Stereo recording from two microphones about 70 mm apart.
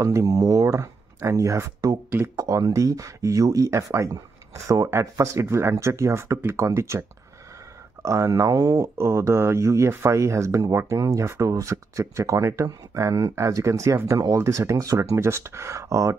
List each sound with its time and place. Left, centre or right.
0.0 s speech: right
2.0 s speech: right
2.3 s speech: right
11.0 s speech: right